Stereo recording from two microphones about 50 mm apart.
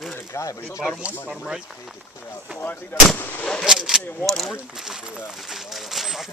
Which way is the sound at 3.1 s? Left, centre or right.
Left.